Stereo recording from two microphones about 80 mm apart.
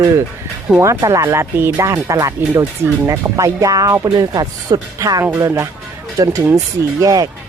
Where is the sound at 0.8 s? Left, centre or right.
Right.